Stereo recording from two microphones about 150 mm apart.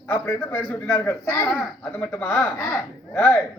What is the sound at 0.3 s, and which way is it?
A man's voice, 15° left (ahead or behind).